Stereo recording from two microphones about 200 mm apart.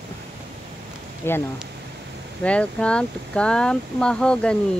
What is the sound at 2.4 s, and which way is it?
Speech, 5° left (ahead or behind).